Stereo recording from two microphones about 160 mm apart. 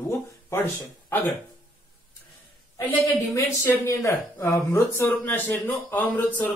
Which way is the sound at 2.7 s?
20° left (ahead or behind).